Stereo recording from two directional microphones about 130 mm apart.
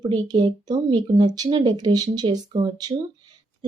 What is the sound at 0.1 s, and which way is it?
Speech, 35° right (ahead or behind).